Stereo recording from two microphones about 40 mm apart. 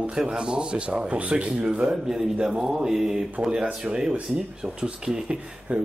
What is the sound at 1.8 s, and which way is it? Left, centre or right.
Speech, centre.